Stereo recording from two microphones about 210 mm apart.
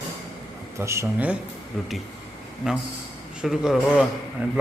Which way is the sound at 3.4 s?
Centre (ahead or behind).